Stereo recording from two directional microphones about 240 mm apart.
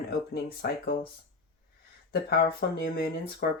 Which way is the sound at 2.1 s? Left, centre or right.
Left.